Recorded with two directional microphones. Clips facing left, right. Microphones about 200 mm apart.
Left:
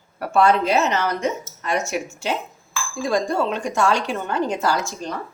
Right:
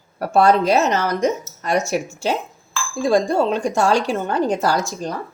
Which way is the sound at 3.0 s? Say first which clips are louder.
Right 4 dB; 30° right (ahead or behind).